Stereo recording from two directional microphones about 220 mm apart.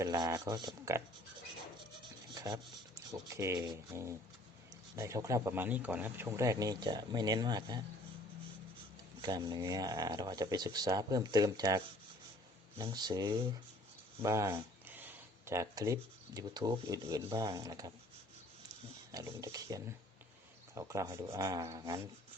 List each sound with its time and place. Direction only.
0.0 s speech: 15° right (ahead or behind)
2.3 s speech: 15° right (ahead or behind)
9.2 s speech: 20° right (ahead or behind)
12.8 s speech: 20° right (ahead or behind)
19.1 s speech: 15° right (ahead or behind)